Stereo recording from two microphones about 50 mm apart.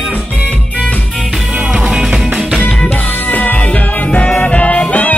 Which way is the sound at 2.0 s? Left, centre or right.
Centre.